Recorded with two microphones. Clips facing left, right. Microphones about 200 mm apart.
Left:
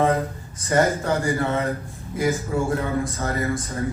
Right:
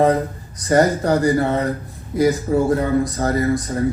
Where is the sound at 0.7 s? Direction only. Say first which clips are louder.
Right 5 dB; 40° right (ahead or behind).